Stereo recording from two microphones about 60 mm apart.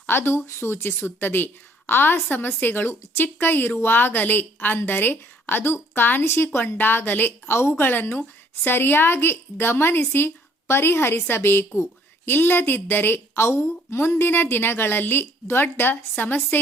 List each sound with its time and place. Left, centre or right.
0.0 s a woman's voice: left